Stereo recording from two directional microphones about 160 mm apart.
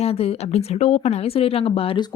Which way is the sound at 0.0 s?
40° left (ahead or behind).